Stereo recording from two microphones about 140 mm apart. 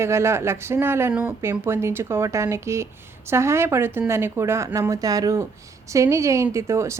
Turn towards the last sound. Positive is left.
turn(degrees=-20)  # may be behind; listen again after turning